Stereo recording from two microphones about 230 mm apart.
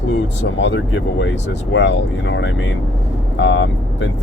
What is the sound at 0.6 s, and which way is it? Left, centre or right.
Speech, left.